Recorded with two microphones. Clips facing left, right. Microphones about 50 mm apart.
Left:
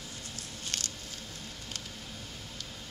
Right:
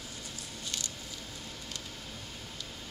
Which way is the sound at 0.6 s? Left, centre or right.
Left.